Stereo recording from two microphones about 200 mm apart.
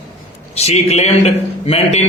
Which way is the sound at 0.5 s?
30° left (ahead or behind).